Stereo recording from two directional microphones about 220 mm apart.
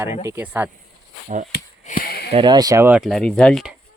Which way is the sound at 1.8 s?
40° left (ahead or behind).